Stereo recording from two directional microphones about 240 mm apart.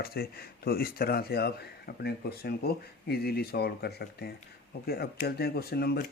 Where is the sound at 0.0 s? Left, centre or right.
Left.